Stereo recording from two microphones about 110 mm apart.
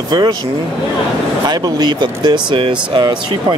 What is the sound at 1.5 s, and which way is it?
Speech, 40° right (ahead or behind).